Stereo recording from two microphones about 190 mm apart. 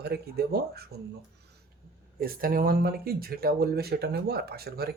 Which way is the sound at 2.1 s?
50° right (ahead or behind).